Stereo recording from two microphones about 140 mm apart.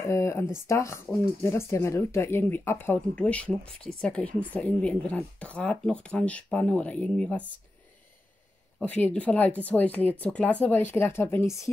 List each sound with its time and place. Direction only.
0.0 s speech: 20° left (ahead or behind)
8.8 s speech: 10° left (ahead or behind)